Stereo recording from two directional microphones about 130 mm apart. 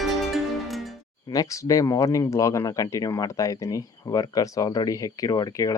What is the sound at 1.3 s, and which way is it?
Speech, 25° left (ahead or behind).